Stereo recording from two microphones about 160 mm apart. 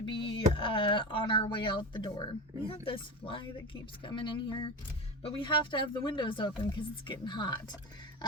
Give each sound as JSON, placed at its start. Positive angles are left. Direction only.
{"t": 0.0, "sound": "speech", "side_deg": 30}